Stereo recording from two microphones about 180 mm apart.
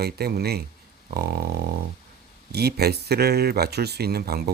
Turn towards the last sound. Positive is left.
turn(degrees=-60)  # may be behind; listen again after turning